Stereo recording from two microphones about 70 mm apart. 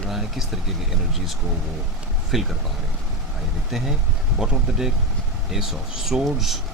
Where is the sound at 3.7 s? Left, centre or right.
Centre.